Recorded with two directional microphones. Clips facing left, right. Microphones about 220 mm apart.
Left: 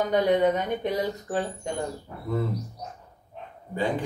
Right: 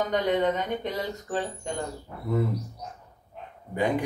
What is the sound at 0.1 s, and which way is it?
Speech, 10° left (ahead or behind).